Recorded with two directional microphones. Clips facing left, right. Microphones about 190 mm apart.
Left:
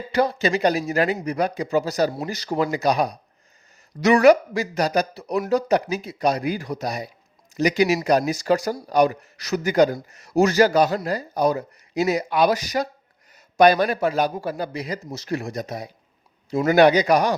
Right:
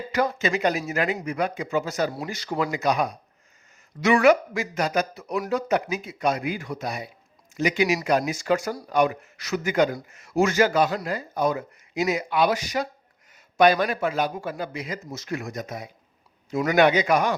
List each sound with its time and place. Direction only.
0.1 s speech: 35° left (ahead or behind)